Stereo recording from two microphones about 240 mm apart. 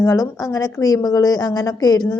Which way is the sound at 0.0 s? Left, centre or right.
Centre.